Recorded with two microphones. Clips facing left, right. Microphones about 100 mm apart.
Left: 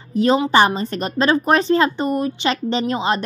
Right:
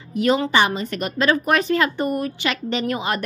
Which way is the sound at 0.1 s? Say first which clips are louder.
Left 3 dB; 30° left (ahead or behind).